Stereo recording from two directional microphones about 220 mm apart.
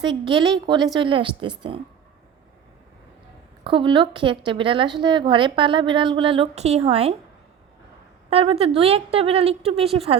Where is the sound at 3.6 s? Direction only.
25° right (ahead or behind).